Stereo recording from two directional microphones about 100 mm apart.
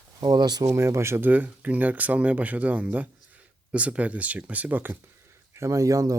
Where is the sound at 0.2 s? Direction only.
40° right (ahead or behind).